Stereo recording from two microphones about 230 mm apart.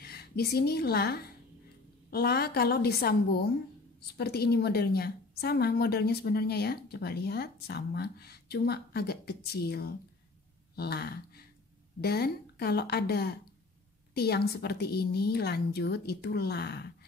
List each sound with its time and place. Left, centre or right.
0.0 s a woman's voice: left
10.8 s a sound: left
12.0 s a woman's voice: left